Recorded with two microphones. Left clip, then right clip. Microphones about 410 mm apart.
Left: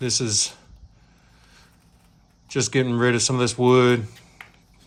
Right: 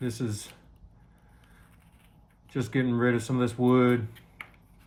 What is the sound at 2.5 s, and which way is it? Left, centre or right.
Speech, centre.